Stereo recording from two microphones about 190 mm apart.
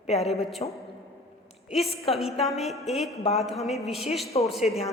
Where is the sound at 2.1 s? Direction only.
30° left (ahead or behind).